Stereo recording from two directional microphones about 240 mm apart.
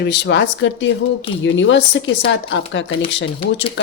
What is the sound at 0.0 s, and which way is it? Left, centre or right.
A woman's voice, left.